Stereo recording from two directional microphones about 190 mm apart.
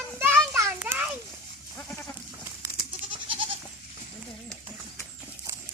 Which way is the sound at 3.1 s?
25° right (ahead or behind).